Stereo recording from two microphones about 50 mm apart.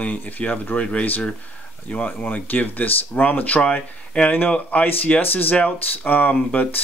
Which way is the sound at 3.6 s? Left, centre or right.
Left.